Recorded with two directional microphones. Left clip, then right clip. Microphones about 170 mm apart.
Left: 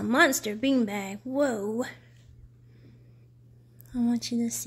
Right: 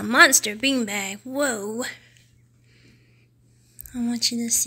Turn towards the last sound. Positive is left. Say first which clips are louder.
# right 7 dB
turn(degrees=10)  # may be behind; listen again after turning